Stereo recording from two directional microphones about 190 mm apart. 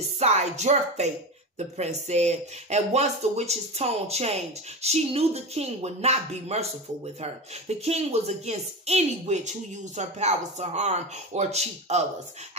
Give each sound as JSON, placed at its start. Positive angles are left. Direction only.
{"t": 0.2, "sound": "speech", "side_deg": -35}